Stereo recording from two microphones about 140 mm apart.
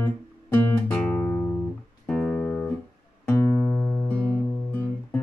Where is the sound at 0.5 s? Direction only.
10° left (ahead or behind).